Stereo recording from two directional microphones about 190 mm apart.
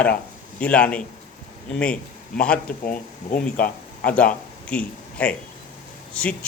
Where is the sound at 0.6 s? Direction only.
5° left (ahead or behind).